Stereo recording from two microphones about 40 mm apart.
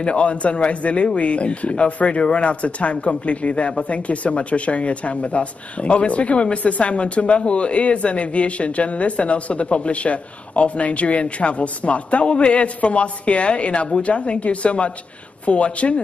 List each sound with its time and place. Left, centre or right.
0.0 s speech: left